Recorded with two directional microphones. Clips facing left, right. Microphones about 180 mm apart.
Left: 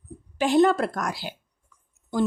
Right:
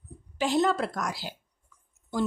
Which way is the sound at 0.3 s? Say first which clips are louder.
Left 6 dB; 55° left (ahead or behind).